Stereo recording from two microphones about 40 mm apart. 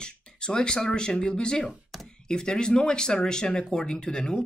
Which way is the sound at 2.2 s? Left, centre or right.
Centre.